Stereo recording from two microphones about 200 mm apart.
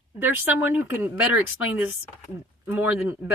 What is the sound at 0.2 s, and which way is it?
Speech, 10° right (ahead or behind).